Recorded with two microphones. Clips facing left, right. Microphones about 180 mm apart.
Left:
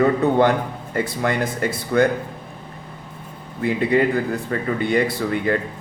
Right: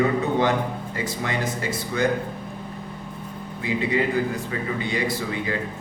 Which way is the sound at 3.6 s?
55° left (ahead or behind).